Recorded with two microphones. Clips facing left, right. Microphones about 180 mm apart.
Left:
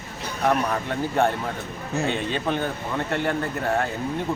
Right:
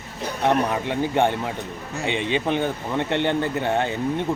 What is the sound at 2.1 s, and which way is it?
Speech, 70° right (ahead or behind).